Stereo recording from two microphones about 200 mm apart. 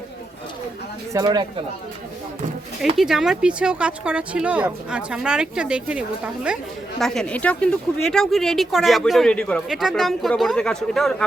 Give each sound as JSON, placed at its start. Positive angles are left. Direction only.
{"t": 1.1, "sound": "speech", "side_deg": -20}
{"t": 3.0, "sound": "speech", "side_deg": 0}